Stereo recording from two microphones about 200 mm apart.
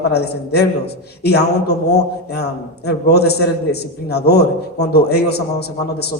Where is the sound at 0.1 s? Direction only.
55° left (ahead or behind).